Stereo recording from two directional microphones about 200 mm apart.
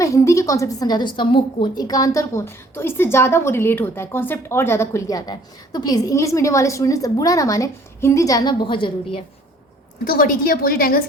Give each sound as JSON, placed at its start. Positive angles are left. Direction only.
{"t": 0.0, "sound": "a woman's voice", "side_deg": 15}
{"t": 10.0, "sound": "a woman's voice", "side_deg": 45}